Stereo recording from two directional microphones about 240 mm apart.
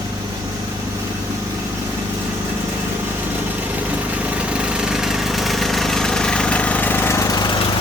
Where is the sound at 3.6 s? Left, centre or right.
Centre.